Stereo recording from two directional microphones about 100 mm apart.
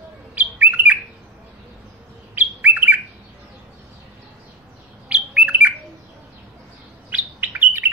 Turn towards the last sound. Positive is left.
turn(degrees=-20)  # may be behind; listen again after turning